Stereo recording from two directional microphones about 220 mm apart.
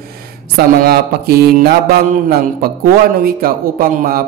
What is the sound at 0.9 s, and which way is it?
Speech, 45° right (ahead or behind).